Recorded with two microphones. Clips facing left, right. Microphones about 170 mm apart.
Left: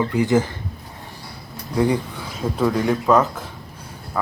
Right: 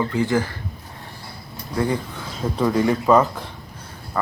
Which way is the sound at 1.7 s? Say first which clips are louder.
Left 3 dB; 15° left (ahead or behind).